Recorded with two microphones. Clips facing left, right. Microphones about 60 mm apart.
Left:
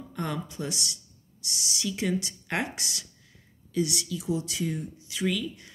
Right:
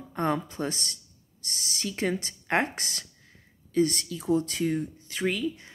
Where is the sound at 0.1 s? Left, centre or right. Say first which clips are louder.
Right 6 dB; right.